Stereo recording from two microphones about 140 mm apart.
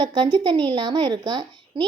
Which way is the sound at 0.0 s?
30° right (ahead or behind).